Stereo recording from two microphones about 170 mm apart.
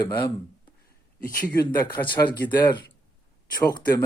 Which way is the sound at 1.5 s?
25° left (ahead or behind).